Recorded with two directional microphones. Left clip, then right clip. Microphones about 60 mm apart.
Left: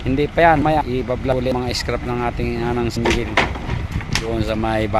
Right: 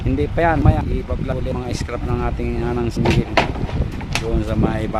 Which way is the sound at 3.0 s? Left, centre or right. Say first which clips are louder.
Even; centre.